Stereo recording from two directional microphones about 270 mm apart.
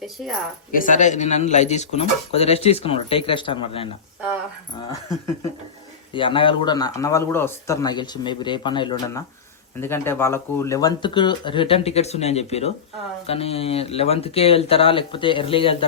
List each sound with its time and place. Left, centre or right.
0.7 s speech: left
6.1 s speech: centre